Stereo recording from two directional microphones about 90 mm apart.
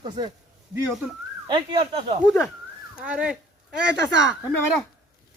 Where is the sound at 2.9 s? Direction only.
15° right (ahead or behind).